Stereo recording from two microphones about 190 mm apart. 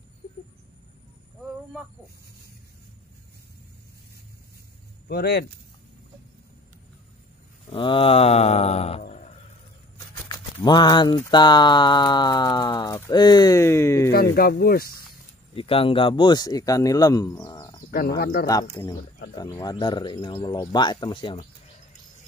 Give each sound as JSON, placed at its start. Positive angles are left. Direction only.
{"t": 5.0, "sound": "speech", "side_deg": 55}
{"t": 7.7, "sound": "mantra", "side_deg": 25}
{"t": 10.2, "sound": "speech", "side_deg": 20}
{"t": 14.3, "sound": "speech", "side_deg": 55}
{"t": 15.5, "sound": "speech", "side_deg": 30}
{"t": 17.9, "sound": "speech", "side_deg": 55}
{"t": 18.5, "sound": "speech", "side_deg": 15}